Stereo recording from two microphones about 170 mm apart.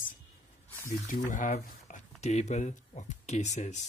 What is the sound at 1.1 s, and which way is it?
Speech, 50° left (ahead or behind).